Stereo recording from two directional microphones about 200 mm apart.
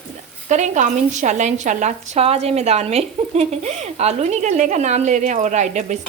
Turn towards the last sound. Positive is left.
turn(degrees=-35)  # may be behind; listen again after turning